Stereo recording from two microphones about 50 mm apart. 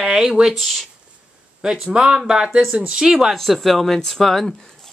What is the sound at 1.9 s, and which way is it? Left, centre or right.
Speech, centre.